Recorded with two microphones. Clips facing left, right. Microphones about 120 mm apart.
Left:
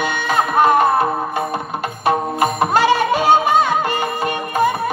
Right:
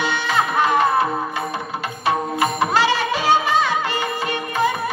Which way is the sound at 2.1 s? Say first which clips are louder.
Left 3 dB; 50° left (ahead or behind).